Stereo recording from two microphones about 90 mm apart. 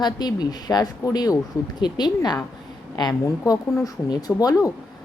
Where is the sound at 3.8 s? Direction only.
45° left (ahead or behind).